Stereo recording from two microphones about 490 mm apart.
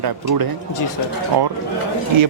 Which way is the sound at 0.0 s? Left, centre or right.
Right.